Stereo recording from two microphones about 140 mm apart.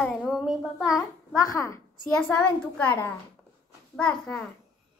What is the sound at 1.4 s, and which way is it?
Speech, 25° left (ahead or behind).